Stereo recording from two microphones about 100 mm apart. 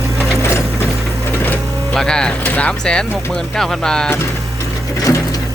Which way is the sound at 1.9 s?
5° left (ahead or behind).